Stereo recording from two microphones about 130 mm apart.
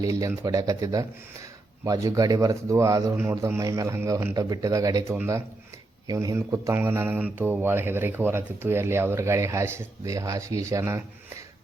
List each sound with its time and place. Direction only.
0.0 s speech: 25° right (ahead or behind)
5.1 s a man's voice: 15° right (ahead or behind)